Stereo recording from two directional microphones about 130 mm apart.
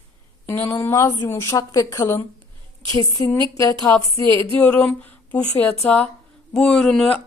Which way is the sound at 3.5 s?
25° left (ahead or behind).